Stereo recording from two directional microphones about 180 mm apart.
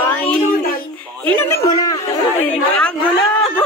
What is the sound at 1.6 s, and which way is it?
Speech, 20° left (ahead or behind).